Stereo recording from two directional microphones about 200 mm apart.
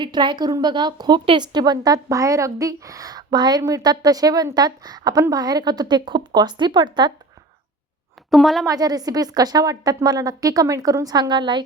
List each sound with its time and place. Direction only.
0.0 s a woman's voice: 25° right (ahead or behind)
8.3 s a woman's voice: centre (ahead or behind)
8.6 s a woman's voice: 20° right (ahead or behind)